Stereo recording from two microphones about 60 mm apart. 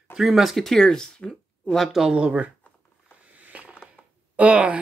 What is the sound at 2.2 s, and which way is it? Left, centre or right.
Speech, right.